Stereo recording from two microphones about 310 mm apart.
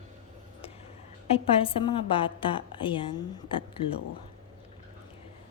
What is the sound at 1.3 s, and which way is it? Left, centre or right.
A woman's voice, centre.